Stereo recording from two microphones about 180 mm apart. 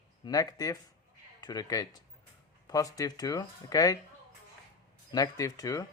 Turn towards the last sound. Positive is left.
turn(degrees=20)  # may be behind; listen again after turning